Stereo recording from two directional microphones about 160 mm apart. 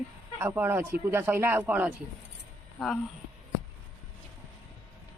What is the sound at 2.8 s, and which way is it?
Speech, 5° left (ahead or behind).